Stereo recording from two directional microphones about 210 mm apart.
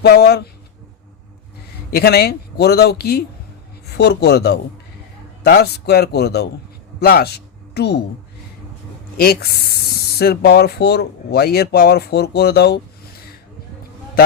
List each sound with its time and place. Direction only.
0.0 s speech: 50° left (ahead or behind)
1.9 s speech: 45° left (ahead or behind)
9.1 s speech: 45° left (ahead or behind)